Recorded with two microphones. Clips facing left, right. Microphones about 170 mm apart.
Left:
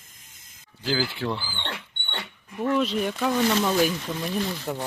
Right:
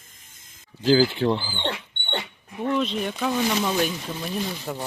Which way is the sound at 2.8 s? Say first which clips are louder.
Left 1 dB; 5° left (ahead or behind).